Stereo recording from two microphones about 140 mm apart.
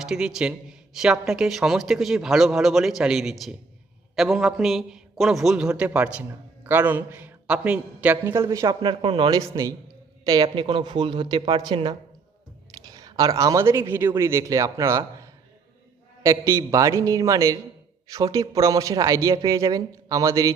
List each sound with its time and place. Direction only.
0.0 s a man's voice: 5° right (ahead or behind); by 8.7 s 20° right (ahead or behind)
8.8 s speech: 35° right (ahead or behind)
10.4 s speech: 35° right (ahead or behind)